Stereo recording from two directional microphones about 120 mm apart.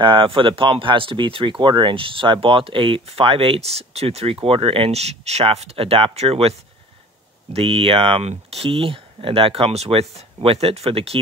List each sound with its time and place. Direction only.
0.0 s speech: 45° right (ahead or behind)
7.5 s speech: 50° right (ahead or behind)